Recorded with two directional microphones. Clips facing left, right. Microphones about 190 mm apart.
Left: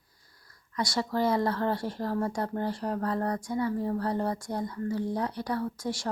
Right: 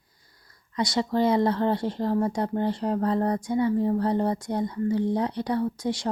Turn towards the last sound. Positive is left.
turn(degrees=-20)  # may be behind; listen again after turning